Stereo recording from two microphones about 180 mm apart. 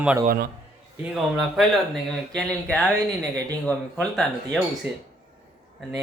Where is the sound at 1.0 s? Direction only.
Centre (ahead or behind).